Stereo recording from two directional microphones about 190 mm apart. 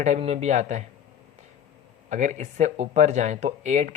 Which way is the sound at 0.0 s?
35° right (ahead or behind).